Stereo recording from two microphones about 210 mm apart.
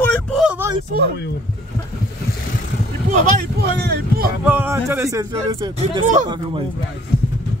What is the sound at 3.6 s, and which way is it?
Speech, 50° right (ahead or behind).